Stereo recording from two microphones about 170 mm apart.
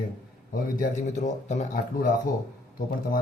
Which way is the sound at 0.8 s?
45° left (ahead or behind).